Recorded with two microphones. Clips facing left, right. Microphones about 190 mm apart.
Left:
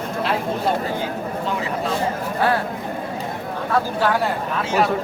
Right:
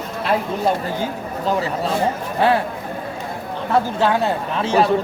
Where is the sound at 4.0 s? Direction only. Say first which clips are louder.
Right 2 dB; 25° right (ahead or behind).